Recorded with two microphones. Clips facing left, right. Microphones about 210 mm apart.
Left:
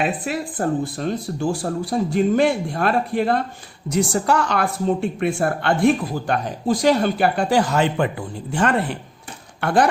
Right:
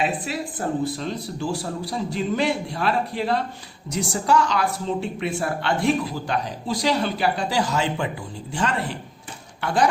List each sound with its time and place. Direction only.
0.3 s a woman's voice: 55° left (ahead or behind)